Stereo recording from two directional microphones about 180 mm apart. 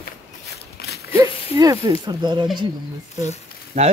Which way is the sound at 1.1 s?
20° right (ahead or behind).